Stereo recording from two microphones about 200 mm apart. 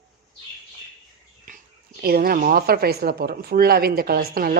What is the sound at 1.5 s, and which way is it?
Bird, 45° right (ahead or behind).